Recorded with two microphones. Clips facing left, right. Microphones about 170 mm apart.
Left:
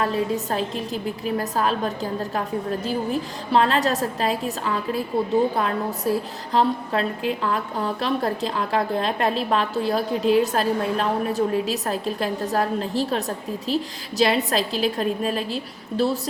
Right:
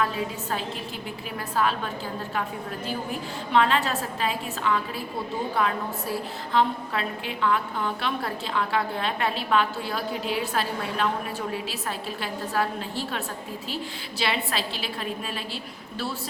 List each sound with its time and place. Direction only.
0.0 s a woman's voice: 40° left (ahead or behind)